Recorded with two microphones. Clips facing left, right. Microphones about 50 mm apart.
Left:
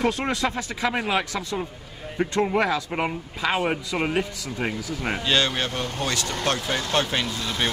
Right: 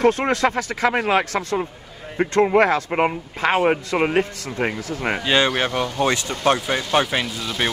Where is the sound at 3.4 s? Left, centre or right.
Right.